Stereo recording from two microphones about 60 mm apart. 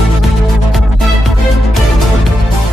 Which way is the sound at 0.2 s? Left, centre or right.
Centre.